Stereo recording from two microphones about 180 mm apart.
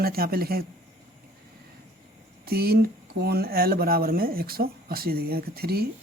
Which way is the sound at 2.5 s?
60° right (ahead or behind).